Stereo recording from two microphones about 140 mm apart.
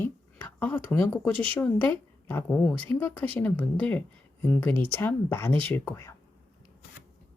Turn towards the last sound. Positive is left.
turn(degrees=20)  # may be behind; listen again after turning